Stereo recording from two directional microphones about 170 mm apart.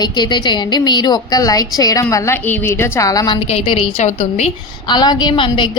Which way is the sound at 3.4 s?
35° left (ahead or behind).